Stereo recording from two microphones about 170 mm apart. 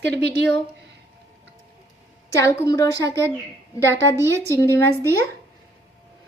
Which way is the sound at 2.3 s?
15° left (ahead or behind).